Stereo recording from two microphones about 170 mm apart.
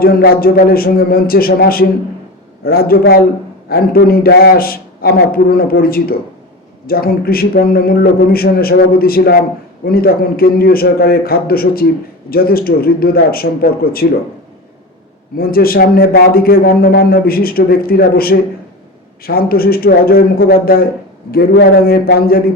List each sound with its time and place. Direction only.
0.0 s a man's voice: 60° left (ahead or behind)
15.4 s a man's voice: 60° left (ahead or behind)